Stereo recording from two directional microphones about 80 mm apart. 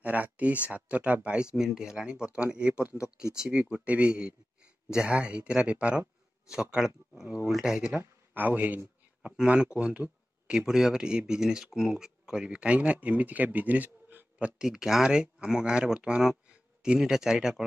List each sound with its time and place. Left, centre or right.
0.0 s speech: centre
8.4 s a man's voice: right
14.6 s speech: centre